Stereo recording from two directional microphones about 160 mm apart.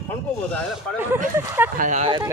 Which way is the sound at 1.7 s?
50° right (ahead or behind).